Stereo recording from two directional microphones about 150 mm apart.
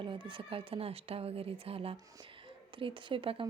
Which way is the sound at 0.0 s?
35° right (ahead or behind).